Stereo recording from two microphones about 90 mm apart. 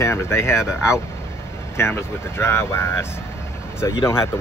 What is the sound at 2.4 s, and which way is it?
Speech, 30° left (ahead or behind).